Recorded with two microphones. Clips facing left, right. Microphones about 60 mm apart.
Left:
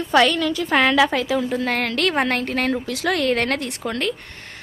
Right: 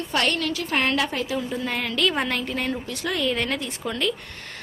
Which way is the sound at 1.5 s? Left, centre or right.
Left.